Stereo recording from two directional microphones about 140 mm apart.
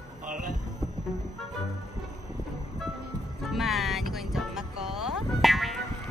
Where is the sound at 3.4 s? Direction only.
Centre (ahead or behind).